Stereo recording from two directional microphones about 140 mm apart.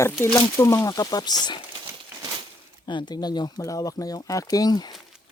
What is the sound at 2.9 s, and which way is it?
Speech, 30° left (ahead or behind).